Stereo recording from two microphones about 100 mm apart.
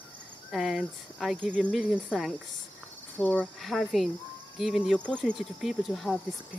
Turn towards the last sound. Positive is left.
turn(degrees=0)  # may be behind; listen again after turning